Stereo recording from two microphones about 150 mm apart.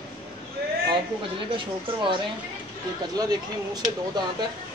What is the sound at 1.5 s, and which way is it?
Speech, 35° right (ahead or behind).